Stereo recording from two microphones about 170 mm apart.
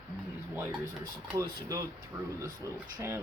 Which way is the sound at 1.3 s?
20° right (ahead or behind).